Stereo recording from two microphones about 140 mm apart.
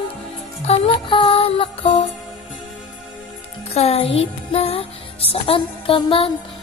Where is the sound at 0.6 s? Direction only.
45° left (ahead or behind).